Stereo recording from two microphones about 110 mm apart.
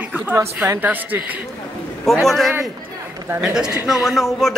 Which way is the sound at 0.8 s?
15° right (ahead or behind).